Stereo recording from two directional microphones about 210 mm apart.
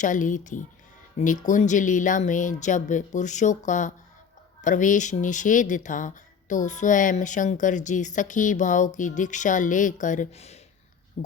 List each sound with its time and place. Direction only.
0.0 s speech: 40° left (ahead or behind)